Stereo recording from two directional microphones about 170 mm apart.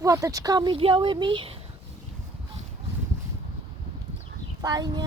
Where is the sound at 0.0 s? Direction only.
20° right (ahead or behind).